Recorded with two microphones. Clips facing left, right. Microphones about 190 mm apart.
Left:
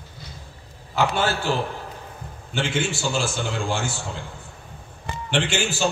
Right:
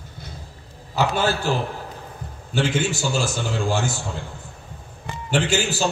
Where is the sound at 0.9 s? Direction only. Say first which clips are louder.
Right 1 dB; 40° right (ahead or behind).